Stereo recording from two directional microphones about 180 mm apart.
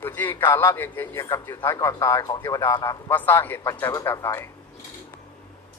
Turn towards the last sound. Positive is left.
turn(degrees=15)  # may be behind; listen again after turning